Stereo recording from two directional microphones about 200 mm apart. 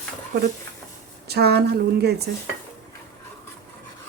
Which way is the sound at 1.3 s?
55° right (ahead or behind).